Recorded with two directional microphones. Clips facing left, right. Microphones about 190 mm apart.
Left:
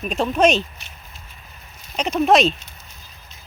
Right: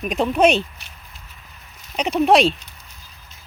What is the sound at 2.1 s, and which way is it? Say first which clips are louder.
Speech: right 1 dB; 15° right (ahead or behind).